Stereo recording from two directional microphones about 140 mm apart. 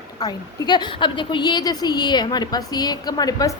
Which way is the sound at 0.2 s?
30° left (ahead or behind).